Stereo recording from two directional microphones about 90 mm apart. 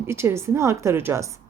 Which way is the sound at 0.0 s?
30° right (ahead or behind).